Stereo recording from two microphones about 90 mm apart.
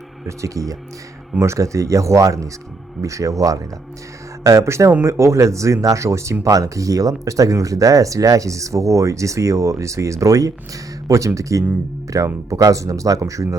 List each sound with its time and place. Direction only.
0.3 s speech: 35° right (ahead or behind)